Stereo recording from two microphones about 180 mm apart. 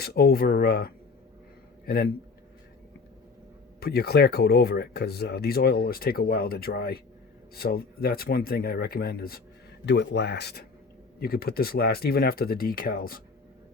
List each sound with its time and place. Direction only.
0.0 s speech: 60° left (ahead or behind)
3.8 s speech: 60° left (ahead or behind)
9.8 s speech: 75° left (ahead or behind); by 13.2 s 55° left (ahead or behind)